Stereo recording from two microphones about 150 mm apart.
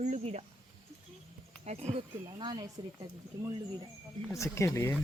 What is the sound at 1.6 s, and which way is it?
Speech, 45° right (ahead or behind).